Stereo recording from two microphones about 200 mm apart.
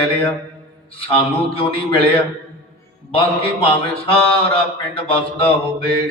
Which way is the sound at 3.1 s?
25° left (ahead or behind).